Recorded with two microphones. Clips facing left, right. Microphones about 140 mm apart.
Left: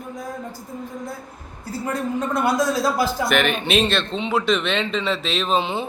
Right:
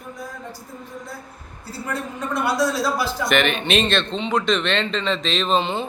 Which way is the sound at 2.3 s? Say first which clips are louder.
Even; 45° left (ahead or behind).